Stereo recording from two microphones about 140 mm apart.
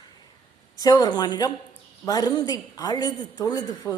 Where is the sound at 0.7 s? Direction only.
25° left (ahead or behind).